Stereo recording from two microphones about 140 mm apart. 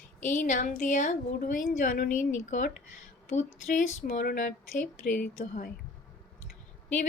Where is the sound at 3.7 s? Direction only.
65° left (ahead or behind).